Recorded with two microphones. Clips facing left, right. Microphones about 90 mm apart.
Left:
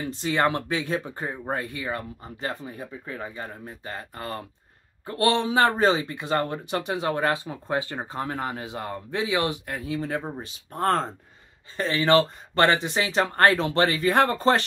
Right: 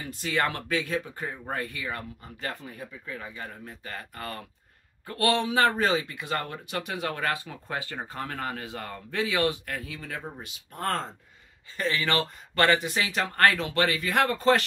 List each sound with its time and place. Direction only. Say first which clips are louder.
0.1 s speech: left 4 dB; 25° left (ahead or behind)